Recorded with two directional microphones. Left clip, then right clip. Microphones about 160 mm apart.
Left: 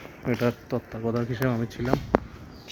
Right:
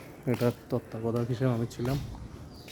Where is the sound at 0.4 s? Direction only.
10° right (ahead or behind).